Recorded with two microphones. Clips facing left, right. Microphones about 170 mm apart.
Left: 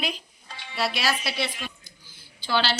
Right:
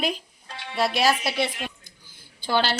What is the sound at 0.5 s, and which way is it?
Music, 55° right (ahead or behind).